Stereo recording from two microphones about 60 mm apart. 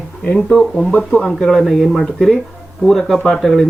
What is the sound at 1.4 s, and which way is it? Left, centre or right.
Speech, centre.